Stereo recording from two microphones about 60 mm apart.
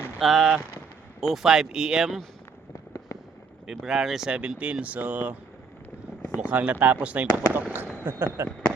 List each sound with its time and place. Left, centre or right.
0.2 s speech: centre
3.8 s speech: centre
4.3 s speech: centre
6.5 s speech: right
8.0 s speech: right